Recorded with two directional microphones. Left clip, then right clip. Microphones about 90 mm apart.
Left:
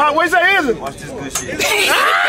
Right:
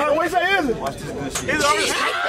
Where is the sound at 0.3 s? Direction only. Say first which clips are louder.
Left 6 dB; 20° left (ahead or behind).